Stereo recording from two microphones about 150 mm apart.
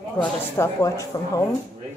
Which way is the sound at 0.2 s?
20° left (ahead or behind).